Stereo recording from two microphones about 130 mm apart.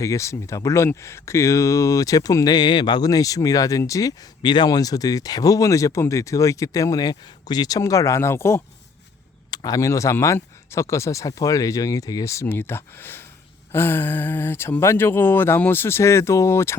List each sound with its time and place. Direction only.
0.0 s speech: 25° left (ahead or behind)
9.5 s speech: 30° left (ahead or behind)